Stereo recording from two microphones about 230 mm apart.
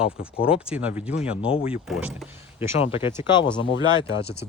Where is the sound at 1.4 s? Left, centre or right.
Left.